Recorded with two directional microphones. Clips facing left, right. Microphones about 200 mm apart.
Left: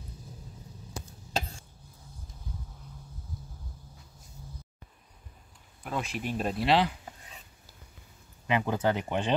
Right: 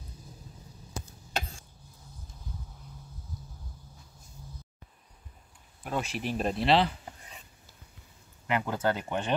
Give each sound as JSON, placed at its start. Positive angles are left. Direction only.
{"t": 5.9, "sound": "speech", "side_deg": 0}
{"t": 8.5, "sound": "speech", "side_deg": 15}